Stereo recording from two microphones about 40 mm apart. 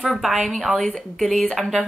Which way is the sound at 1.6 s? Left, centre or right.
Centre.